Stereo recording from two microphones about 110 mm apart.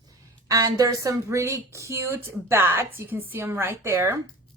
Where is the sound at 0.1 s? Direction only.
35° right (ahead or behind).